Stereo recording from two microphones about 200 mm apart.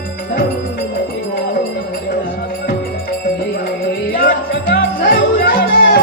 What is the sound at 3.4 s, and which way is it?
Music, 55° left (ahead or behind).